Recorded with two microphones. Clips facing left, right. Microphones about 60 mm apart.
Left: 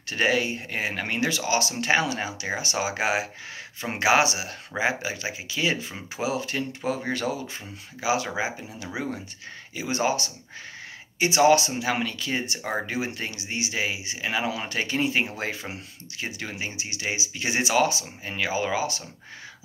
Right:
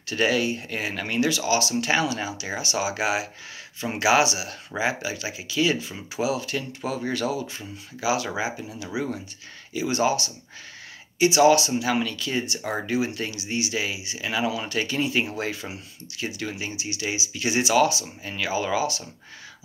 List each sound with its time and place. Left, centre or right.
0.1 s speech: left